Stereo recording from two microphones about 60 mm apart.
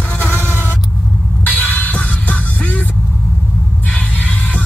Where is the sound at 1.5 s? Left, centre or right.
Left.